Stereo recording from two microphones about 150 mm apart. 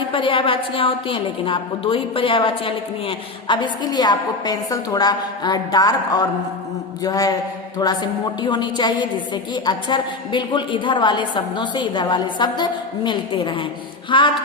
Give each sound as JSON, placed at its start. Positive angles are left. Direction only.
{"t": 0.1, "sound": "a woman's voice", "side_deg": 35}
{"t": 7.0, "sound": "a sound", "side_deg": 25}
{"t": 7.8, "sound": "a woman's voice", "side_deg": 30}